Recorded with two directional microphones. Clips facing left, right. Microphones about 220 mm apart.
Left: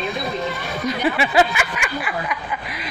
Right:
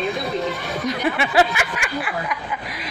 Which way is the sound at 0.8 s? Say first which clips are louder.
Left 2 dB; centre (ahead or behind).